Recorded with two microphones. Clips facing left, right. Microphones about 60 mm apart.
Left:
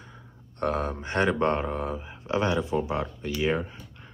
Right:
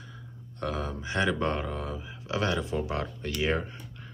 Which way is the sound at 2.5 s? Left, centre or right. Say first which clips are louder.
Left 3 dB; centre.